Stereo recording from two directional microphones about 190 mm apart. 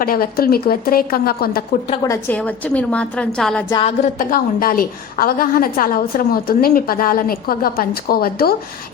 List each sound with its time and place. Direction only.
0.0 s a woman's voice: 50° left (ahead or behind)
2.0 s a woman's voice: 10° left (ahead or behind)
3.7 s a sound: 25° left (ahead or behind)
4.3 s a woman's voice: 50° left (ahead or behind)